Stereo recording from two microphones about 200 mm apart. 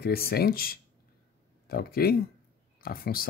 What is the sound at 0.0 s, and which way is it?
Speech, 50° left (ahead or behind).